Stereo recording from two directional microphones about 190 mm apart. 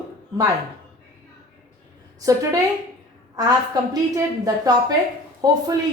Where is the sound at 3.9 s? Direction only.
20° right (ahead or behind).